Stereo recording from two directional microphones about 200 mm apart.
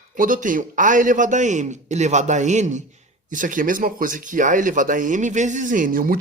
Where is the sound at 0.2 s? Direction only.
40° right (ahead or behind).